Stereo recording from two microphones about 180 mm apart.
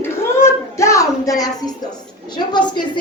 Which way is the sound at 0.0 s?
15° left (ahead or behind).